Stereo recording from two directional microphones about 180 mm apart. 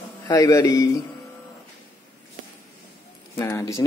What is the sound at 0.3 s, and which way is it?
Speech, 20° left (ahead or behind).